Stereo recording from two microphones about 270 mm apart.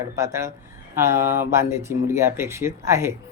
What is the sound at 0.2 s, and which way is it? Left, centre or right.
Speech, centre.